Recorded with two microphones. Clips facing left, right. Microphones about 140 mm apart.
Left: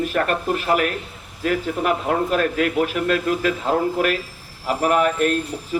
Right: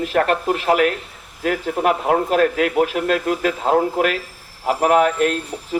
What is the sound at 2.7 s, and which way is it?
Speech, 55° right (ahead or behind).